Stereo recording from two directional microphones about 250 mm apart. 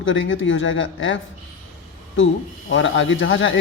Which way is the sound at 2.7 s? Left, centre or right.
Left.